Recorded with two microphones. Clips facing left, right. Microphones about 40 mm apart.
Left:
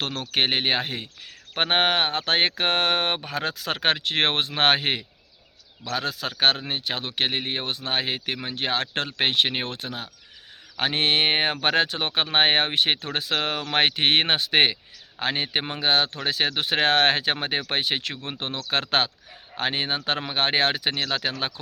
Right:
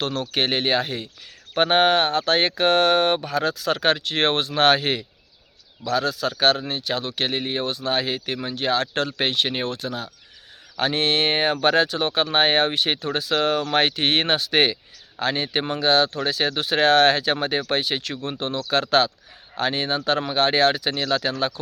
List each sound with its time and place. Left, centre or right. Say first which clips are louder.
0.0 s speech: right 1 dB; left